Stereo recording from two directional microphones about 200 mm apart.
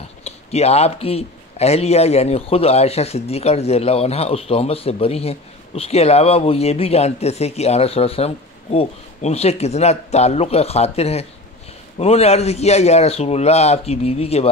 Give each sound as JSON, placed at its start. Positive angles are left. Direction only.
{"t": 0.2, "sound": "speech", "side_deg": 30}